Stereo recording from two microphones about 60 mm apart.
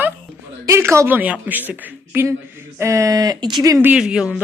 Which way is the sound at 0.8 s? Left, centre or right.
Right.